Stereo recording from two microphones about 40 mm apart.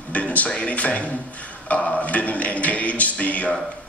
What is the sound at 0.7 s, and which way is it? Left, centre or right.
A man's voice, left.